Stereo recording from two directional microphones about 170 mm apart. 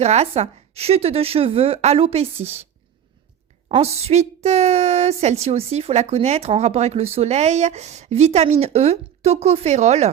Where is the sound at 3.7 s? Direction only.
35° right (ahead or behind).